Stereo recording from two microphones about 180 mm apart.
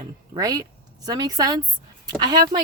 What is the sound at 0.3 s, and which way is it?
Speech, 20° right (ahead or behind).